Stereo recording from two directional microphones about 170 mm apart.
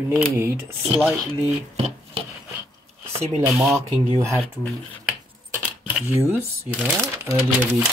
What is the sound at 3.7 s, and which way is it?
Speech, 15° right (ahead or behind).